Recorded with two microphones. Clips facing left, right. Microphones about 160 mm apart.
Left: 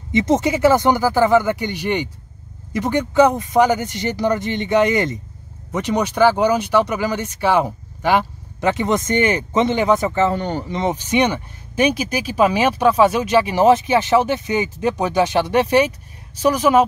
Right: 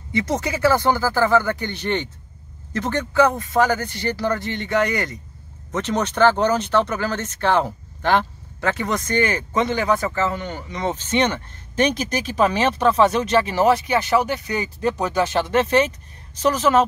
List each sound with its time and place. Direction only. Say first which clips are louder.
0.1 s speech: left 6 dB; 20° left (ahead or behind)
10.8 s speech: left 2 dB; 15° left (ahead or behind)